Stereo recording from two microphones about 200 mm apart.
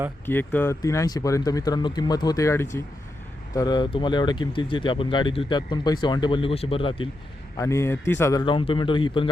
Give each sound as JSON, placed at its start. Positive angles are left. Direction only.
{"t": 0.3, "sound": "speech", "side_deg": 10}
{"t": 7.5, "sound": "speech", "side_deg": 15}